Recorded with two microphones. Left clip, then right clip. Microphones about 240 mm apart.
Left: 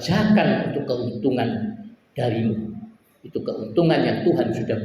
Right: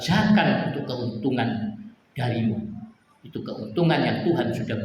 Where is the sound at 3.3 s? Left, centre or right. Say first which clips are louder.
Left 7 dB; right.